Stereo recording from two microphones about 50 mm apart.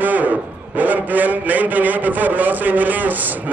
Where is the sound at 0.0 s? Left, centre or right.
Right.